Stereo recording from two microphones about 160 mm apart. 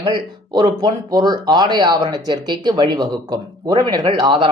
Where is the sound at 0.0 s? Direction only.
30° right (ahead or behind).